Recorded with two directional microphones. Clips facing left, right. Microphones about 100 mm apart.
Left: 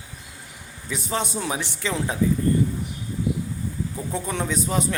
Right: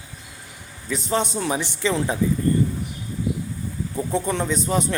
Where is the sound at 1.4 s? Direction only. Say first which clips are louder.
Right 4 dB; 5° left (ahead or behind).